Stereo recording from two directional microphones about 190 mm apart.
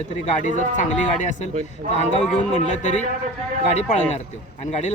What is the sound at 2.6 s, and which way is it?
Speech, 40° left (ahead or behind).